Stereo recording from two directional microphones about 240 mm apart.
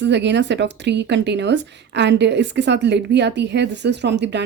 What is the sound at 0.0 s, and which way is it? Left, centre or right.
Speech, right.